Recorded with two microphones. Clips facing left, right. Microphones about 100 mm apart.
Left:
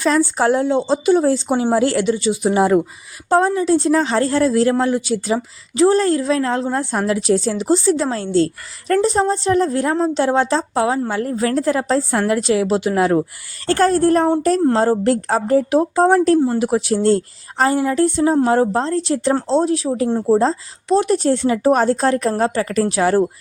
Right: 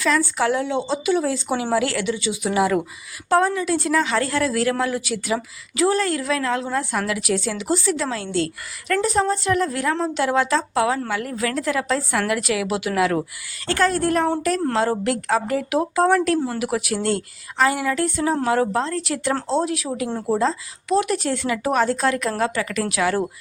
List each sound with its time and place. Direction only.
0.0 s a woman's voice: 35° left (ahead or behind)
13.7 s a woman's voice: 35° left (ahead or behind)